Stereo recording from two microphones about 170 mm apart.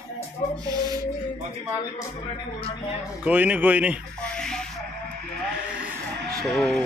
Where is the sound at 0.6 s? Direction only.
20° right (ahead or behind).